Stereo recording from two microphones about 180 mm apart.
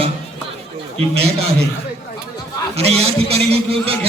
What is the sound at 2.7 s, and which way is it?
A man's voice, 35° right (ahead or behind).